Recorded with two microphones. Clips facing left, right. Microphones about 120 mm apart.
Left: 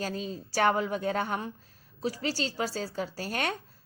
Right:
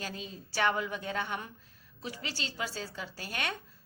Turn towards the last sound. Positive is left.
turn(degrees=40)  # may be behind; listen again after turning